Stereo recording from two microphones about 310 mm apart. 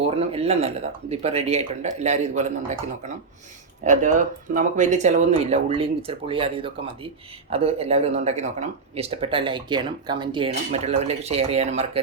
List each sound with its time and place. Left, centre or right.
0.2 s speech: centre